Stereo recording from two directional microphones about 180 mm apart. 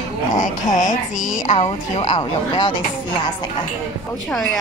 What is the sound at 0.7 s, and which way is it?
A woman's voice, 45° left (ahead or behind).